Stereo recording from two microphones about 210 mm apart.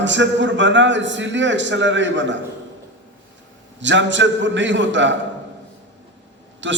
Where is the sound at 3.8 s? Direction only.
60° right (ahead or behind).